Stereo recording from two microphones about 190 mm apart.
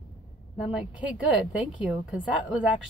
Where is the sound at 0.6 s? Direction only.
5° right (ahead or behind).